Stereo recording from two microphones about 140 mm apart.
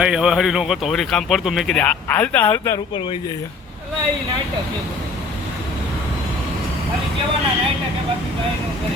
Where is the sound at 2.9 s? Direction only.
35° left (ahead or behind).